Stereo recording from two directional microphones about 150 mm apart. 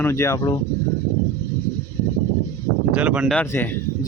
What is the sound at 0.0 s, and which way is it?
Speech, 20° left (ahead or behind).